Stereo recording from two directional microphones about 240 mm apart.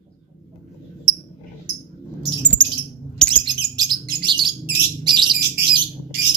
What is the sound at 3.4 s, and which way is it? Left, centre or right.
Bird, centre.